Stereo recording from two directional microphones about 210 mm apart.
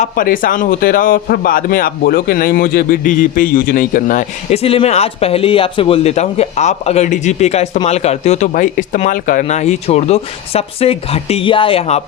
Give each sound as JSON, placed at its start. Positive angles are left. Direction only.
{"t": 0.0, "sound": "a man's voice", "side_deg": 40}